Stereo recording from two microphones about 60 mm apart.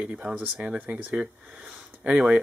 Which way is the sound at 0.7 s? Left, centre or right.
Right.